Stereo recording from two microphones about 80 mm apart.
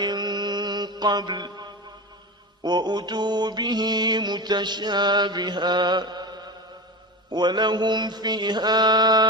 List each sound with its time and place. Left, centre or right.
0.0 s mantra: right